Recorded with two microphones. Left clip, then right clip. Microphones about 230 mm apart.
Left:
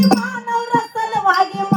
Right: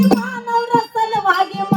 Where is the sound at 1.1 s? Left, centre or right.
Centre.